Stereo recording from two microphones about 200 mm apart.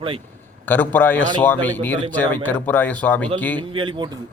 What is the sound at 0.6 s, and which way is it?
A man's voice, 10° left (ahead or behind).